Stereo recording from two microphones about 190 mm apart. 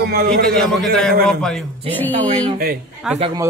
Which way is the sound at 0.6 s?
5° left (ahead or behind).